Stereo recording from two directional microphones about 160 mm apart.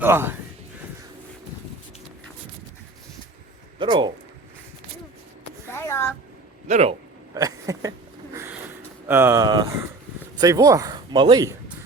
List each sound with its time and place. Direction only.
0.0 s speech: 15° right (ahead or behind)
3.8 s speech: 30° right (ahead or behind)
5.6 s a sound: 15° left (ahead or behind)
6.7 s speech: 45° right (ahead or behind)
7.3 s a sound: 20° right (ahead or behind)
9.0 s speech: 15° right (ahead or behind)